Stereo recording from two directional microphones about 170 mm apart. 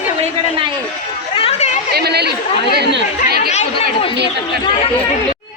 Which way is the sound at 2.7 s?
90° right.